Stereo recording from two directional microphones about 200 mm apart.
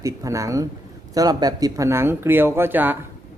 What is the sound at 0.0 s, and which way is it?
Speech, 15° right (ahead or behind).